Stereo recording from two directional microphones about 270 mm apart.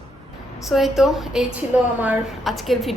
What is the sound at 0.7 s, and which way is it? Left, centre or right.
A woman's voice, centre.